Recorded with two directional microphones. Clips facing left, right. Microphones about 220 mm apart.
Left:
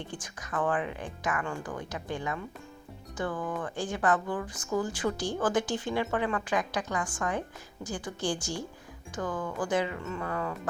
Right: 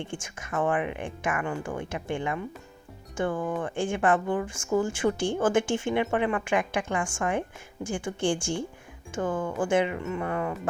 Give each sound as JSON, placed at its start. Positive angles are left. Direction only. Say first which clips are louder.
{"t": 0.3, "sound": "speech", "louder": "right 3 dB", "side_deg": -25}